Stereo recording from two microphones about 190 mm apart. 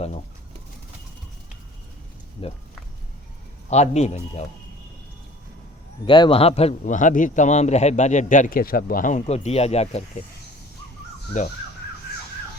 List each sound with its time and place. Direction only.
2.4 s speech: 30° left (ahead or behind)
3.7 s a man's voice: 35° left (ahead or behind)
6.1 s a man's voice: 25° left (ahead or behind)
11.3 s a man's voice: 40° left (ahead or behind)